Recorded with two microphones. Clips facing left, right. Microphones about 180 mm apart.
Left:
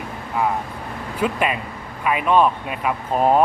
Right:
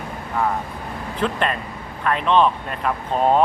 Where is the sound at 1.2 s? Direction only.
10° left (ahead or behind).